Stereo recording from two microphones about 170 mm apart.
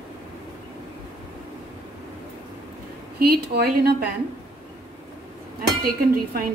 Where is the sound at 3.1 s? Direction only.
65° right (ahead or behind).